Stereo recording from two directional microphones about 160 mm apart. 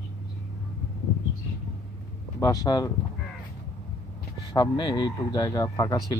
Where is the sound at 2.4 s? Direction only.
20° left (ahead or behind).